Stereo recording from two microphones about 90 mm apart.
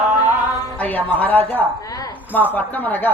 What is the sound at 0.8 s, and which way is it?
A woman's voice, 20° left (ahead or behind).